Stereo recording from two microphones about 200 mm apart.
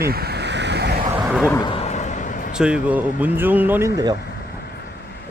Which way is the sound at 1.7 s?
35° left (ahead or behind).